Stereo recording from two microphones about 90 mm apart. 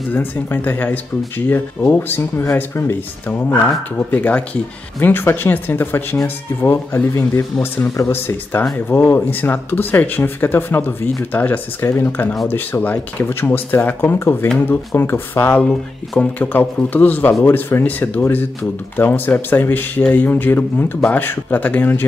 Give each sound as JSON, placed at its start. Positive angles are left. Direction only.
{"t": 0.1, "sound": "speech", "side_deg": 20}